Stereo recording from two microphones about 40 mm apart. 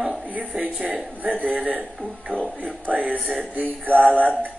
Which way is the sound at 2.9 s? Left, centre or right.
Right.